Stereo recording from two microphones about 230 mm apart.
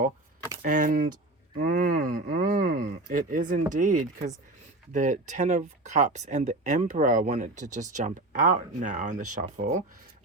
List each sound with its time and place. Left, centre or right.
0.6 s speech: right